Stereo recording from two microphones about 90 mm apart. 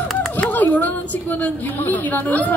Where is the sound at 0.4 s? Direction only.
20° left (ahead or behind).